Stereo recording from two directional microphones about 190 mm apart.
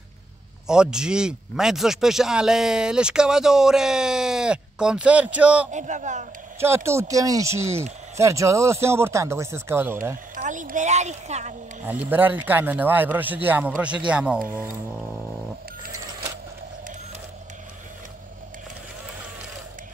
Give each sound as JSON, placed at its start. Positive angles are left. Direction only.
{"t": 0.7, "sound": "speech", "side_deg": -5}
{"t": 5.7, "sound": "a woman's voice", "side_deg": -40}
{"t": 6.6, "sound": "speech", "side_deg": -15}
{"t": 10.3, "sound": "a woman's voice", "side_deg": -40}
{"t": 11.8, "sound": "speech", "side_deg": -10}
{"t": 15.9, "sound": "sewing machine", "side_deg": -20}